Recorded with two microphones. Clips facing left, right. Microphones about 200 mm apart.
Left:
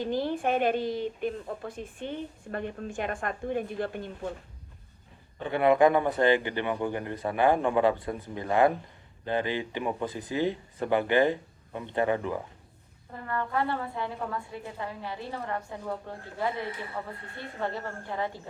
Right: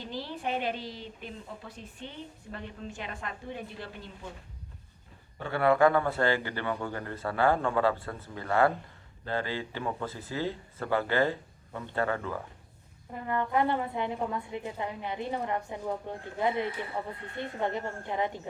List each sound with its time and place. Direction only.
0.0 s a woman's voice: 50° left (ahead or behind)
5.4 s speech: 20° left (ahead or behind)
13.2 s a woman's voice: 20° right (ahead or behind)